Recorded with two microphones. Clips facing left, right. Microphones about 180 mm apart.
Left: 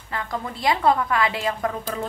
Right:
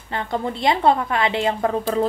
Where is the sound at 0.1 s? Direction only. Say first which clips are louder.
Right 5 dB; 25° right (ahead or behind).